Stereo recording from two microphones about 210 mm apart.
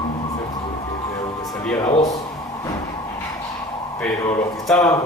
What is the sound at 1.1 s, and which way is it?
Music, 15° left (ahead or behind).